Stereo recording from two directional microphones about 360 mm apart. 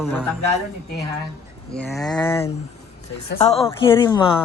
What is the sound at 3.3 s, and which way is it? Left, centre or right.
A woman's voice, centre.